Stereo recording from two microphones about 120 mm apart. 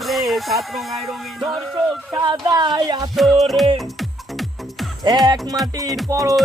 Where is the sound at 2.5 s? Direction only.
35° right (ahead or behind).